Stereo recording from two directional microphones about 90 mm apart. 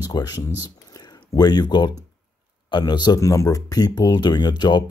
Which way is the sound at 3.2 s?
40° left (ahead or behind).